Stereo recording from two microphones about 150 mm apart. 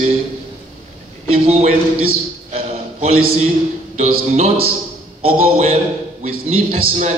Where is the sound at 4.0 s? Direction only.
50° right (ahead or behind).